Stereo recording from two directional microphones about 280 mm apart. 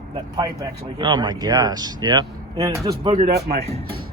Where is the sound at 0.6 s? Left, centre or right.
Centre.